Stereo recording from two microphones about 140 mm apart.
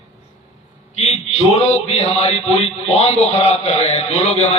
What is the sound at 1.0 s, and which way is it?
A man's voice, 50° left (ahead or behind).